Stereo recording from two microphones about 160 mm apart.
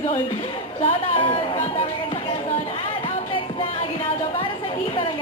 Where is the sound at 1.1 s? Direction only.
35° left (ahead or behind).